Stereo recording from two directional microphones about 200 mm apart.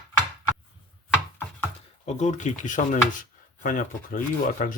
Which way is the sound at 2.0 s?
35° left (ahead or behind).